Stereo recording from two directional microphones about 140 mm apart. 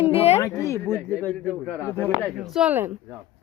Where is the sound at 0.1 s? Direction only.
45° left (ahead or behind).